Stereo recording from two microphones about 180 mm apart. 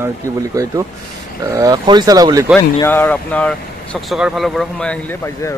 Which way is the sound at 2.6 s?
15° left (ahead or behind).